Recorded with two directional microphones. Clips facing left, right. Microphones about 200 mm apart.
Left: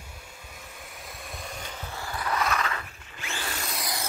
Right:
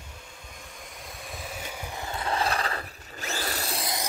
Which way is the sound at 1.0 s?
Centre (ahead or behind).